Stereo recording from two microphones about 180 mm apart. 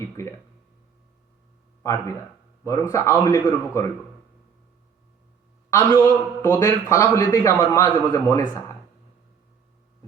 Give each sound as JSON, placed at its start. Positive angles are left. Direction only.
{"t": 0.2, "sound": "a man's voice", "side_deg": 15}
{"t": 1.8, "sound": "a man's voice", "side_deg": 15}
{"t": 5.7, "sound": "a man's voice", "side_deg": 15}